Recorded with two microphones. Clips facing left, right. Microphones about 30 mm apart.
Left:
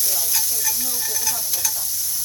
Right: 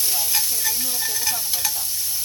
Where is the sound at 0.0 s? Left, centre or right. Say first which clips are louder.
Right 1 dB; right.